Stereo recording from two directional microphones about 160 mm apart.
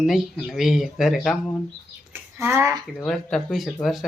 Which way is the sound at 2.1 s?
15° right (ahead or behind).